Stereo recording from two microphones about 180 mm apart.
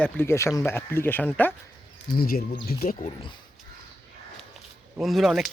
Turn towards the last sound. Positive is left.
turn(degrees=0)  # may be behind; listen again after turning